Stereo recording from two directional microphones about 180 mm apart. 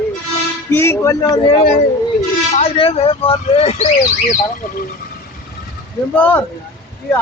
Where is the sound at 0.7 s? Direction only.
15° left (ahead or behind).